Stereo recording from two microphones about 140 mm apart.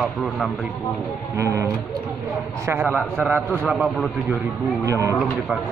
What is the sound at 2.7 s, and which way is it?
A man's voice, 10° right (ahead or behind).